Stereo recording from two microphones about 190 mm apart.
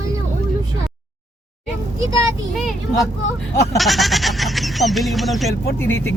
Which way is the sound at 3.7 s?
Centre (ahead or behind).